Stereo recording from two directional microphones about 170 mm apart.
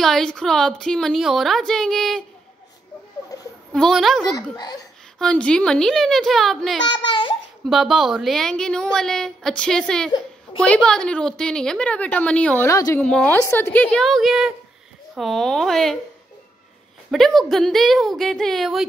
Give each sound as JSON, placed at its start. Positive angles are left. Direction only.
{"t": 0.0, "sound": "a woman's voice", "side_deg": 5}
{"t": 3.7, "sound": "a woman's voice", "side_deg": 0}
{"t": 4.3, "sound": "speech", "side_deg": 20}
{"t": 5.2, "sound": "a woman's voice", "side_deg": 5}
{"t": 6.8, "sound": "speech", "side_deg": 25}
{"t": 7.6, "sound": "a woman's voice", "side_deg": 0}
{"t": 13.0, "sound": "a woman's voice", "side_deg": 5}
{"t": 17.1, "sound": "a woman's voice", "side_deg": 0}